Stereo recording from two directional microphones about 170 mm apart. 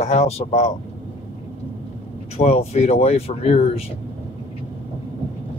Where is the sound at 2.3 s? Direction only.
40° left (ahead or behind).